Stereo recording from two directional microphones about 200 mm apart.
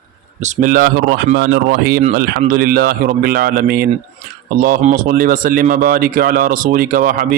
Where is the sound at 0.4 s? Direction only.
40° right (ahead or behind).